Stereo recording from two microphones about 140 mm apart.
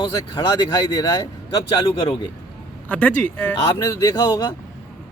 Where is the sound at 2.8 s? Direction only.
10° left (ahead or behind).